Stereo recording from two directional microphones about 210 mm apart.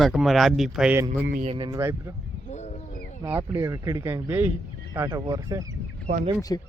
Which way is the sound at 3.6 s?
10° right (ahead or behind).